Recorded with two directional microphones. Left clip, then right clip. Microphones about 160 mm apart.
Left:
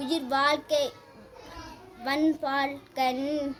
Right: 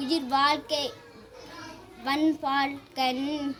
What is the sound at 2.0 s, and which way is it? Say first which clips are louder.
Child singing: right 1 dB; 30° left (ahead or behind).